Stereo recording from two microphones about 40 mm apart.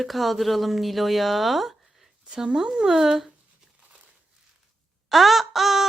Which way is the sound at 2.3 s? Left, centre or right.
Centre.